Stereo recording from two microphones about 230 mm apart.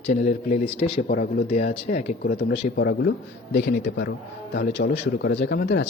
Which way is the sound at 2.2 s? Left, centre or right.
Left.